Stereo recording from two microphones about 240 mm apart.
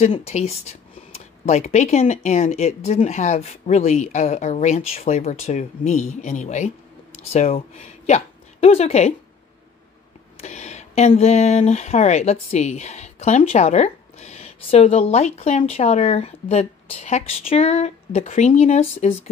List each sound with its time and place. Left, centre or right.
0.0 s speech: left
10.4 s speech: left